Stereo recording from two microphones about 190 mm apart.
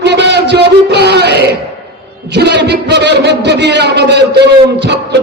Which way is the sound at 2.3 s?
65° right (ahead or behind).